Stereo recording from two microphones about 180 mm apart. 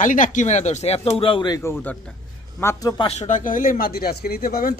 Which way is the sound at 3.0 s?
35° left (ahead or behind).